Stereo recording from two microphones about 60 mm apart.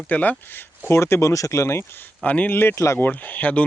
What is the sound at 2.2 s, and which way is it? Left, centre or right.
Speech, left.